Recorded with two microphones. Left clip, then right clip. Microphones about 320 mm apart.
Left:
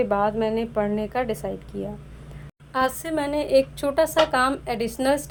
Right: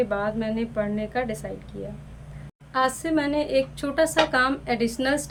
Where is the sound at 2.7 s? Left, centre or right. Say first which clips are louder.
Right 1 dB; left.